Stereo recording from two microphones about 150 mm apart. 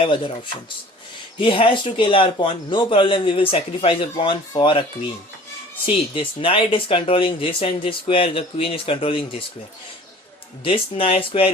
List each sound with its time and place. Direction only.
0.0 s speech: 35° left (ahead or behind)
1.4 s speech: 35° left (ahead or behind)
10.6 s speech: 35° left (ahead or behind)